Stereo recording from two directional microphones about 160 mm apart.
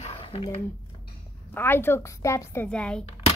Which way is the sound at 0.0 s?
35° left (ahead or behind).